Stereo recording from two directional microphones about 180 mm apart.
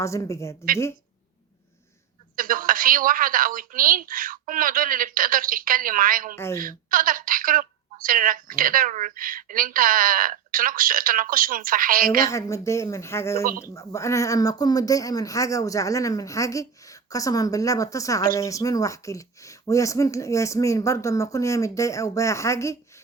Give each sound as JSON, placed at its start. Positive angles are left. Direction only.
{"t": 0.0, "sound": "speech", "side_deg": 15}
{"t": 2.3, "sound": "speech", "side_deg": -50}
{"t": 6.3, "sound": "speech", "side_deg": 15}
{"t": 6.6, "sound": "speech", "side_deg": -50}
{"t": 12.3, "sound": "speech", "side_deg": 15}
{"t": 13.4, "sound": "speech", "side_deg": -55}
{"t": 13.7, "sound": "speech", "side_deg": 15}